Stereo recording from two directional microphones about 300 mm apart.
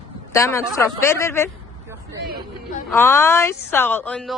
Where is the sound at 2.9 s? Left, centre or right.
Centre.